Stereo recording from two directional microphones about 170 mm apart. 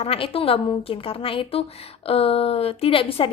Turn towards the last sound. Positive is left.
turn(degrees=30)  # may be behind; listen again after turning